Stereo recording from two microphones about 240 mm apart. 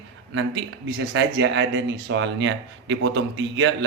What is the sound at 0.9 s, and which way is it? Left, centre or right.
Speech, right.